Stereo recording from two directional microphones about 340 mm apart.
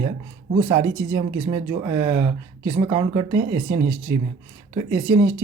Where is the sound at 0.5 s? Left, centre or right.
Centre.